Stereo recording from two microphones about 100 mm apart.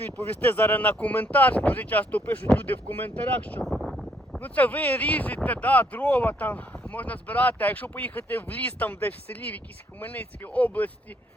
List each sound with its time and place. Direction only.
0.3 s speech: 15° left (ahead or behind)
3.6 s a sound: centre (ahead or behind)
4.4 s speech: 15° left (ahead or behind)